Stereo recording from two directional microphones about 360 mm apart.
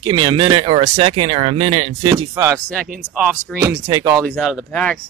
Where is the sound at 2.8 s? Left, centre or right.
Right.